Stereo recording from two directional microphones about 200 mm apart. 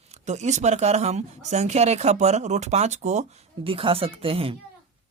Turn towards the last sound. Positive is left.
turn(degrees=-30)  # may be behind; listen again after turning